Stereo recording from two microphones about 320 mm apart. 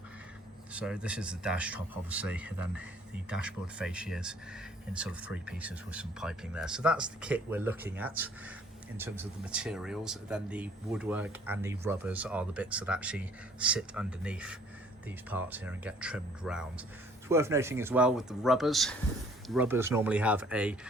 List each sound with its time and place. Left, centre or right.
0.7 s speech: centre